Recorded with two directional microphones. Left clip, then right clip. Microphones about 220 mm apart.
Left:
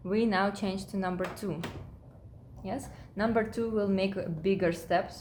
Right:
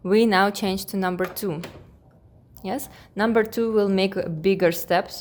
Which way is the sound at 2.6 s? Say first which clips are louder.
Right 8 dB; 50° right (ahead or behind).